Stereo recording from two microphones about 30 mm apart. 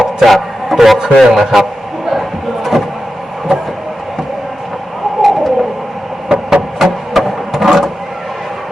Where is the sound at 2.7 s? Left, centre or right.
Centre.